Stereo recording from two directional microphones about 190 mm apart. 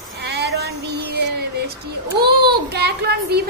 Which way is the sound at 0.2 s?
60° right (ahead or behind).